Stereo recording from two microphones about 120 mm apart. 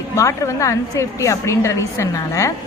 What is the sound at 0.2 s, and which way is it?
A woman's voice, 25° left (ahead or behind).